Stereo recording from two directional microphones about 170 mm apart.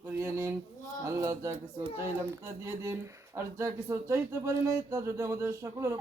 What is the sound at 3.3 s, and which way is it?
Speech, 15° right (ahead or behind).